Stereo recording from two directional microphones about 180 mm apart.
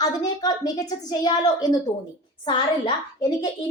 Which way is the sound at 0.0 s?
20° left (ahead or behind).